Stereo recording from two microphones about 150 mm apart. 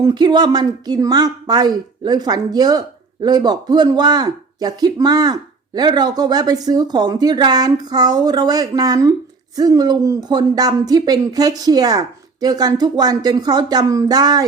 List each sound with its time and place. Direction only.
0.0 s speech: 30° right (ahead or behind)